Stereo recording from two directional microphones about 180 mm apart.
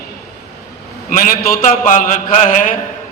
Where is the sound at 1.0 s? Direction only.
50° left (ahead or behind).